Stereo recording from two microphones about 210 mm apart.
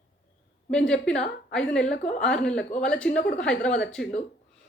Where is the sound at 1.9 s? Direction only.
35° left (ahead or behind).